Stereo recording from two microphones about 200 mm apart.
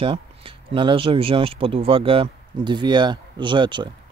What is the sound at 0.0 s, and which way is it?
Speech, 25° right (ahead or behind).